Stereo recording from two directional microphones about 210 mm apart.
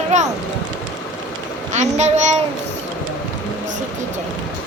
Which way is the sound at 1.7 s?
35° right (ahead or behind).